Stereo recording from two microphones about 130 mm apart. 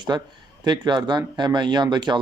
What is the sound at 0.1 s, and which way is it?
Speech, 35° right (ahead or behind).